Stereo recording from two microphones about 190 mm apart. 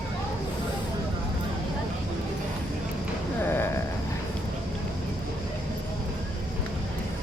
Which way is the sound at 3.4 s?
10° left (ahead or behind).